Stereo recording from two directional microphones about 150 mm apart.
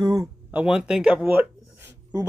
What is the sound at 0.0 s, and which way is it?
Speech, 25° right (ahead or behind).